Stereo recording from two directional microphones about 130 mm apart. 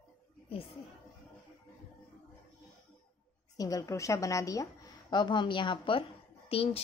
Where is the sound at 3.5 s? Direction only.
25° left (ahead or behind).